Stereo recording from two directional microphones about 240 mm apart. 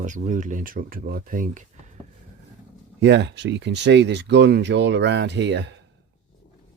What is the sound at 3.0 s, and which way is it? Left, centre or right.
Speech, right.